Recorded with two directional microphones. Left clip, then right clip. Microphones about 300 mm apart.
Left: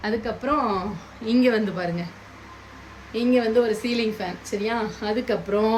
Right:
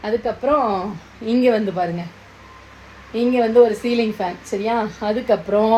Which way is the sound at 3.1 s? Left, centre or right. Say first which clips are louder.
Right 6 dB; centre.